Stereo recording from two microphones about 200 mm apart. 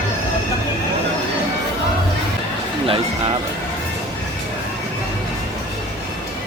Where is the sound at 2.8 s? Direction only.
25° right (ahead or behind).